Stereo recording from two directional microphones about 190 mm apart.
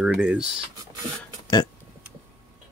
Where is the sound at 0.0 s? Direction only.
5° right (ahead or behind).